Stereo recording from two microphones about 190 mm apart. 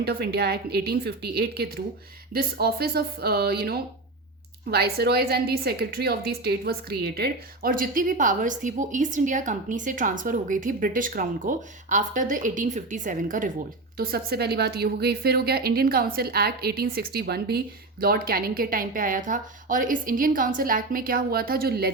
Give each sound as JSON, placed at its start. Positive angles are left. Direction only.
{"t": 0.0, "sound": "a woman's voice", "side_deg": -55}